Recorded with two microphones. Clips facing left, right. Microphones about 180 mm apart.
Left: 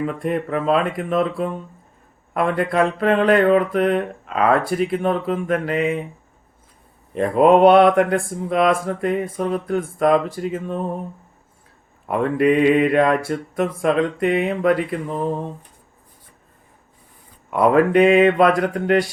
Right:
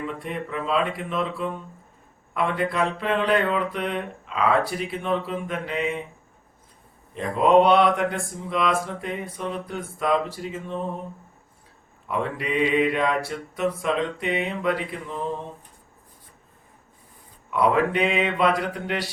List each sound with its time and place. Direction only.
0.0 s mantra: 50° left (ahead or behind)
7.1 s mantra: 55° left (ahead or behind)
12.0 s mantra: 55° left (ahead or behind)
17.5 s mantra: 50° left (ahead or behind)